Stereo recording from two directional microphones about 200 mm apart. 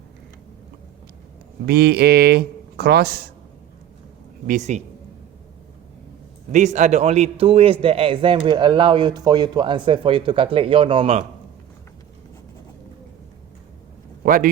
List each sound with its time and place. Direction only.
1.6 s speech: 50° right (ahead or behind)
4.4 s a man's voice: 35° right (ahead or behind)
6.5 s a man's voice: 35° right (ahead or behind)
14.2 s speech: 45° right (ahead or behind)